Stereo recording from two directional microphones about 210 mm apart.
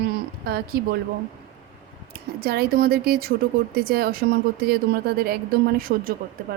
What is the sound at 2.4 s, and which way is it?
Speech, 50° right (ahead or behind).